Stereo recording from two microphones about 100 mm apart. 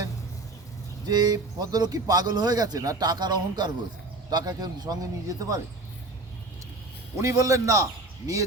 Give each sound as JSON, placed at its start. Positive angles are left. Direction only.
{"t": 1.0, "sound": "speech", "side_deg": -40}
{"t": 7.2, "sound": "speech", "side_deg": -30}